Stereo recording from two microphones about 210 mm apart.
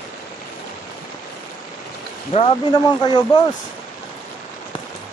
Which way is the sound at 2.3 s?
25° left (ahead or behind).